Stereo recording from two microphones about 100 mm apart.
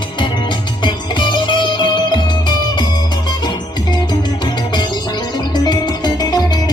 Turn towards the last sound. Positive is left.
turn(degrees=45)  # may be behind; listen again after turning